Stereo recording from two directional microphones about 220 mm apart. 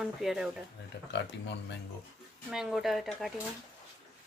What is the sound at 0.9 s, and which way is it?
Speech, 50° left (ahead or behind).